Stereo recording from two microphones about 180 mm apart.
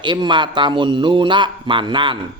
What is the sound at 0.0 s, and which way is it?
A man's voice, 25° right (ahead or behind).